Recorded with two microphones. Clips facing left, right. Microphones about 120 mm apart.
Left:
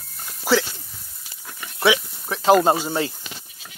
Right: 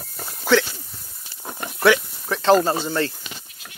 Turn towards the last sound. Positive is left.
turn(degrees=10)  # may be behind; listen again after turning